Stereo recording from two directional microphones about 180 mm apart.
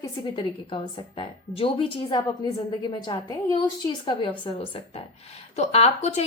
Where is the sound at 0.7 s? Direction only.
30° left (ahead or behind).